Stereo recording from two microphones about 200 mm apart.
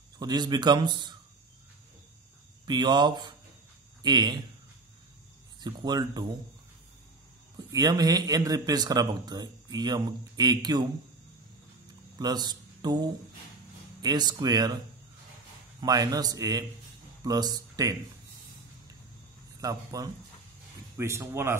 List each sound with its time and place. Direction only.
0.2 s a man's voice: 20° right (ahead or behind)
2.6 s a man's voice: 20° right (ahead or behind)
5.6 s a man's voice: 20° right (ahead or behind)
7.5 s a man's voice: 20° right (ahead or behind)
12.2 s a man's voice: 20° right (ahead or behind)
15.8 s a man's voice: 20° right (ahead or behind)
19.6 s speech: 20° right (ahead or behind)